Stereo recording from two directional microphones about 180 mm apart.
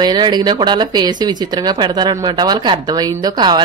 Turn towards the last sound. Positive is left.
turn(degrees=-20)  # may be behind; listen again after turning